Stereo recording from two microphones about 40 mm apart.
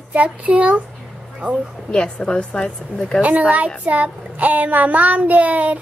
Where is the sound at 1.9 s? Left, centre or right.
Left.